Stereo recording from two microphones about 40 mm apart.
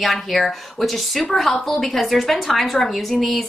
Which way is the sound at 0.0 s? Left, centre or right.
Centre.